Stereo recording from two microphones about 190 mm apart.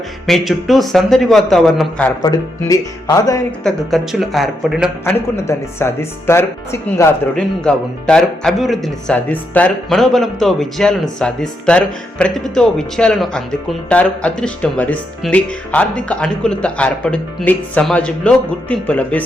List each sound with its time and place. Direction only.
0.3 s speech: centre (ahead or behind)
2.2 s speech: 20° left (ahead or behind)
3.6 s speech: centre (ahead or behind)
5.0 s speech: 10° left (ahead or behind)
7.6 s speech: 5° left (ahead or behind)